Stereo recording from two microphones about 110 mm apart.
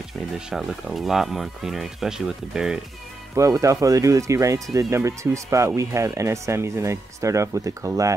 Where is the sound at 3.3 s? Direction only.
30° right (ahead or behind).